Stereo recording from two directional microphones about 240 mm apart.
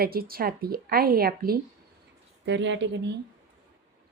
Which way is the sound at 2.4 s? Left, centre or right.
Right.